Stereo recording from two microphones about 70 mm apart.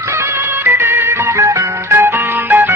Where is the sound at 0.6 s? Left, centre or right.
Right.